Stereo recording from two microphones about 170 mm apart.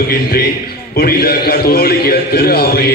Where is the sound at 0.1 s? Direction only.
60° left (ahead or behind).